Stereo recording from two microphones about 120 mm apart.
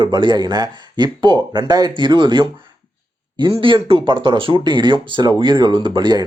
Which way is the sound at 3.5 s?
45° right (ahead or behind).